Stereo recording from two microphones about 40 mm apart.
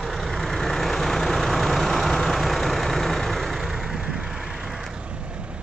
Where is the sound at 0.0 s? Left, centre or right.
Centre.